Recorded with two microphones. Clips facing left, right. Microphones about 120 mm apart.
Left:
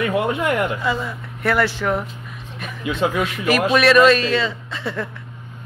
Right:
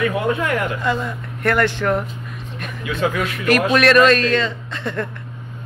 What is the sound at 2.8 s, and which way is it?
Speech, 25° left (ahead or behind).